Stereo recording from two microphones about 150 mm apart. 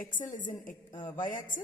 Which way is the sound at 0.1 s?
60° left (ahead or behind).